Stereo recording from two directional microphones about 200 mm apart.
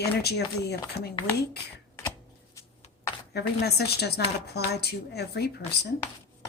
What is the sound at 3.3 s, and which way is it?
A woman's voice, 55° left (ahead or behind).